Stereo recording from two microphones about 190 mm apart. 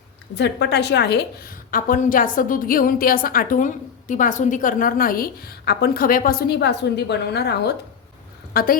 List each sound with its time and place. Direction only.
0.3 s a woman's voice: 65° left (ahead or behind)
8.5 s a woman's voice: 50° left (ahead or behind)